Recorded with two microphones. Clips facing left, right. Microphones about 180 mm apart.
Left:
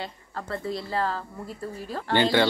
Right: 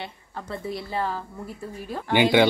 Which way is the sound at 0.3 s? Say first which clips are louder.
Left 1 dB; 20° right (ahead or behind).